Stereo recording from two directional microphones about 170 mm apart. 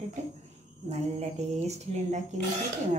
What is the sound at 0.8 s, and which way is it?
Speech, 35° right (ahead or behind).